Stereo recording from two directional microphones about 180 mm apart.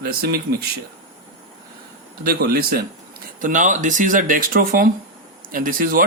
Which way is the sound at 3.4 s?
45° right (ahead or behind).